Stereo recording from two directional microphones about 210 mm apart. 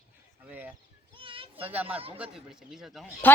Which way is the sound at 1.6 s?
10° right (ahead or behind).